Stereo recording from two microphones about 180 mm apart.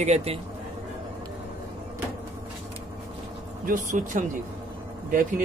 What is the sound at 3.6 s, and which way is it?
Speech, 45° right (ahead or behind).